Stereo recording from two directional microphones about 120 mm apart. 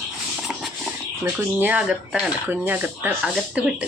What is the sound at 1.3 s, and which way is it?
Speech, 10° right (ahead or behind).